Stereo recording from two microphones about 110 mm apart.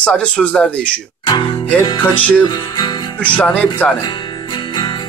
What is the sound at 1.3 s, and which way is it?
Music, 40° left (ahead or behind).